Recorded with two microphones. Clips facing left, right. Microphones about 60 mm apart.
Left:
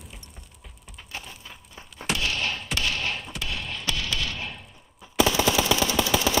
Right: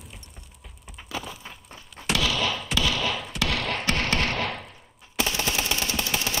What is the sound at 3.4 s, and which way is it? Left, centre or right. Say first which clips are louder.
Basketball bounce: right 11 dB; right.